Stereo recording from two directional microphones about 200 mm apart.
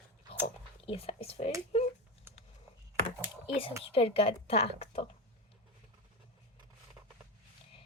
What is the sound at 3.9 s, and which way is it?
A woman's voice, 30° left (ahead or behind).